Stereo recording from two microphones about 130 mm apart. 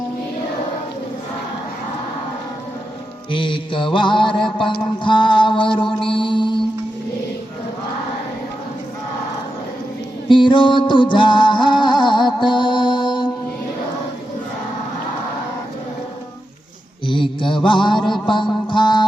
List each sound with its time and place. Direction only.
3.3 s mantra: 40° left (ahead or behind)
10.2 s music: 40° left (ahead or behind)
17.1 s mantra: 40° left (ahead or behind)